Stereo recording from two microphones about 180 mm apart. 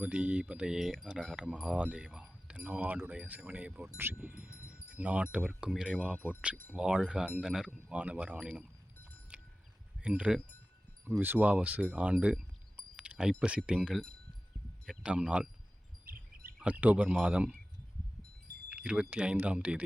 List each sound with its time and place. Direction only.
0.0 s speech: 5° right (ahead or behind)
4.7 s wind chime: 5° right (ahead or behind)
6.7 s speech: 5° right (ahead or behind)
10.0 s speech: 5° right (ahead or behind)
16.0 s a sound: 55° right (ahead or behind)
16.6 s speech: 10° right (ahead or behind)
18.7 s speech: 5° right (ahead or behind)